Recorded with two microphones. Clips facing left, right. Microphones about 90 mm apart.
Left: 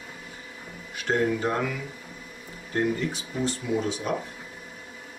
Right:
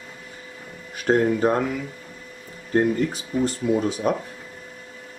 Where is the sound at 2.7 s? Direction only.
40° right (ahead or behind).